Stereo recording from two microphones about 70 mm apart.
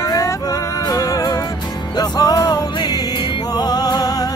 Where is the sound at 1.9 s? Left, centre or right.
Left.